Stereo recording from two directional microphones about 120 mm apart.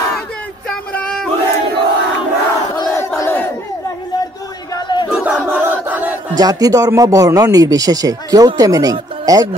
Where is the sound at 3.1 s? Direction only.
20° left (ahead or behind).